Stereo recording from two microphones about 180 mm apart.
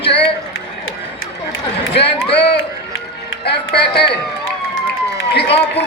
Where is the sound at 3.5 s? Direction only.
65° left (ahead or behind).